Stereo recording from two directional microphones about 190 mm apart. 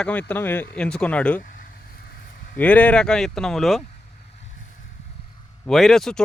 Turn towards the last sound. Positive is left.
turn(degrees=0)  # may be behind; listen again after turning